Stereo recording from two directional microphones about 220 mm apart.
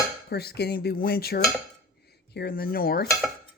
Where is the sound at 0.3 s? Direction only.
45° left (ahead or behind).